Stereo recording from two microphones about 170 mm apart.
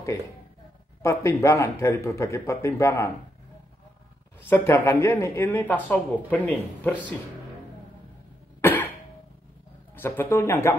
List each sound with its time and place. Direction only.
1.0 s speech: 15° left (ahead or behind)
4.4 s speech: 15° left (ahead or behind)
8.5 s cough: 10° left (ahead or behind)
9.9 s speech: 15° left (ahead or behind)